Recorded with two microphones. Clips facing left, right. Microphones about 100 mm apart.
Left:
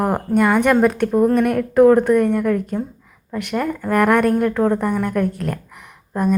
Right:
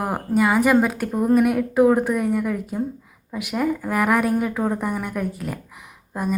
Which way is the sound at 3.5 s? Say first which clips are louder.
Even; 65° left (ahead or behind).